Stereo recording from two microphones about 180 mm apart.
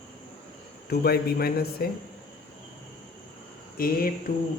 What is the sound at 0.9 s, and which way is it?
Speech, 60° left (ahead or behind).